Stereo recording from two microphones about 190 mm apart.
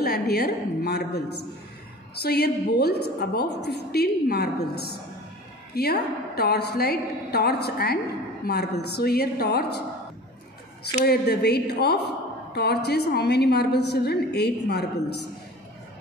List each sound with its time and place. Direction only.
0.0 s a woman's voice: 55° left (ahead or behind)
2.2 s a woman's voice: 60° left (ahead or behind)
5.8 s a woman's voice: 55° left (ahead or behind)
11.1 s a woman's voice: 60° left (ahead or behind)